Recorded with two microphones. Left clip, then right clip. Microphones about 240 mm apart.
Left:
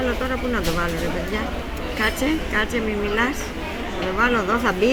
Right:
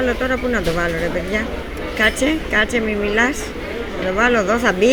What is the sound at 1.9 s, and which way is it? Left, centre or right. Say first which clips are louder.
Speech: right 5 dB; centre.